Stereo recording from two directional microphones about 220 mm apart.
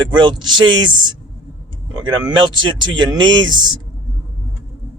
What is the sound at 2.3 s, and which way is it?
Speech, 20° right (ahead or behind).